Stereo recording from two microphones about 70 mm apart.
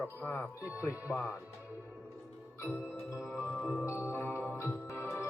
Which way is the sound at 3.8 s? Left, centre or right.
Left.